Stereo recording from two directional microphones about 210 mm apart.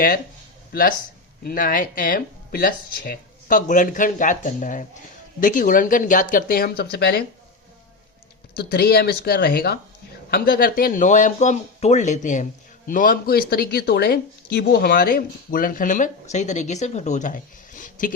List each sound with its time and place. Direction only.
0.7 s speech: 40° left (ahead or behind)
8.5 s speech: 45° left (ahead or behind)